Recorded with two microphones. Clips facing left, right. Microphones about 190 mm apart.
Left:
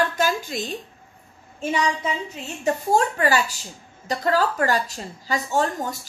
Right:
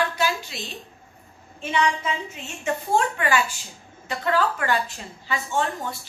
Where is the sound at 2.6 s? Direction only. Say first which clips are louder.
Left 3 dB; 40° left (ahead or behind).